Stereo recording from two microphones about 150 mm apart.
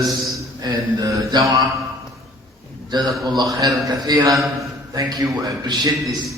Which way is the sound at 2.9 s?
25° right (ahead or behind).